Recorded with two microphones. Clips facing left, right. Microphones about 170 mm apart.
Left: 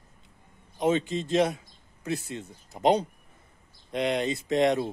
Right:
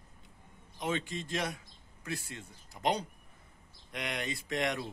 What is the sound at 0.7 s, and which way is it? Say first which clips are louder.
A man's voice: left 10 dB; 20° left (ahead or behind).